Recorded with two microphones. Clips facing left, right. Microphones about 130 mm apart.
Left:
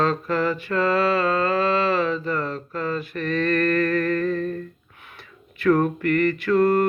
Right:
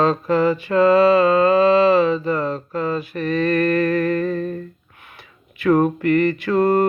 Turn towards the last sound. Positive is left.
turn(degrees=-20)  # may be behind; listen again after turning